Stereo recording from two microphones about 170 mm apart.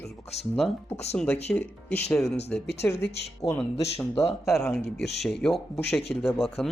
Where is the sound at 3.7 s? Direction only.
35° left (ahead or behind).